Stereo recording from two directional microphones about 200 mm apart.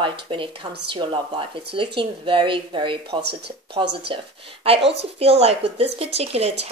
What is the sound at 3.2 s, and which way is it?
Speech, 55° right (ahead or behind).